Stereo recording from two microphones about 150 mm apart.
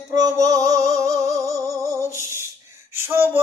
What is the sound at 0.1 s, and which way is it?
Music, 25° right (ahead or behind).